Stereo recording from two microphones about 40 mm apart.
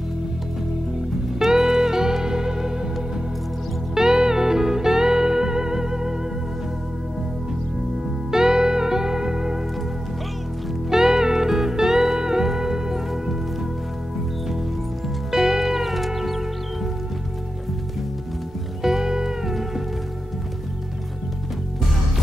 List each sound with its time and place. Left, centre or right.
1.4 s music: centre
3.9 s music: centre
8.3 s music: centre
10.9 s music: centre
15.3 s music: centre
18.8 s music: centre